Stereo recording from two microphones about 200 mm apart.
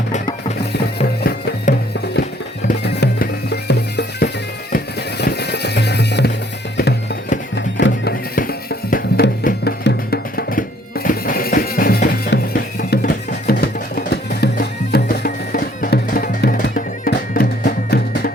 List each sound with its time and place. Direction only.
1.2 s music: 50° left (ahead or behind)
8.4 s music: 45° left (ahead or behind)